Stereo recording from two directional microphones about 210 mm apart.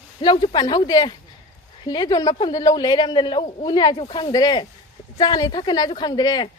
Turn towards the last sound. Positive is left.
turn(degrees=20)  # may be behind; listen again after turning